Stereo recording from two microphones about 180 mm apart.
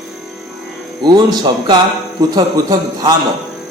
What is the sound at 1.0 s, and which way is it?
A man's voice, 25° right (ahead or behind).